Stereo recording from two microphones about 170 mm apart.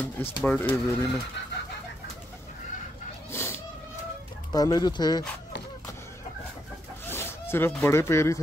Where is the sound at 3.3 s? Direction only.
15° left (ahead or behind).